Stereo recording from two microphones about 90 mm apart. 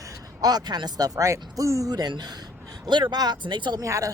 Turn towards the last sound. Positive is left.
turn(degrees=-40)  # may be behind; listen again after turning